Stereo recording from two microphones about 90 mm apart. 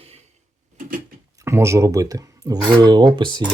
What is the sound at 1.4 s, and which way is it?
Speech, 30° right (ahead or behind).